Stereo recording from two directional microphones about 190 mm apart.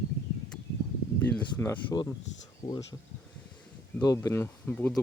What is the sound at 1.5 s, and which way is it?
Speech, 10° left (ahead or behind).